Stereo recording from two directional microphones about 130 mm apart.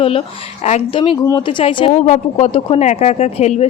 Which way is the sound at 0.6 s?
60° left (ahead or behind).